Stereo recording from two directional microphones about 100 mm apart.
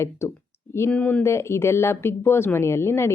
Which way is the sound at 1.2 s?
25° left (ahead or behind).